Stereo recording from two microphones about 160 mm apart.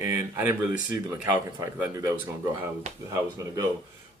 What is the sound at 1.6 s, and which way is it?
Speech, 20° right (ahead or behind).